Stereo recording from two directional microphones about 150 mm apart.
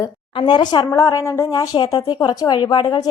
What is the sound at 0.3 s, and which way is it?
A woman's voice, 30° left (ahead or behind).